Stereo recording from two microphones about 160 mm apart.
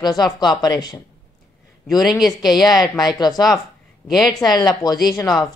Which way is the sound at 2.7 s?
25° left (ahead or behind).